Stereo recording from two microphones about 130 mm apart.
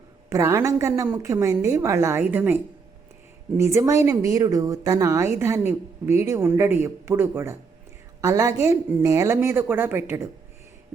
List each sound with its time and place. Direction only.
0.3 s speech: 20° right (ahead or behind)
3.6 s speech: 25° right (ahead or behind)